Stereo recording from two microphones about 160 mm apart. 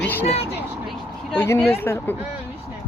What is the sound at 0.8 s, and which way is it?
Vehicle, 5° left (ahead or behind).